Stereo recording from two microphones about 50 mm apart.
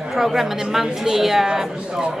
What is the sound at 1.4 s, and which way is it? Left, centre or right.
Speech, centre.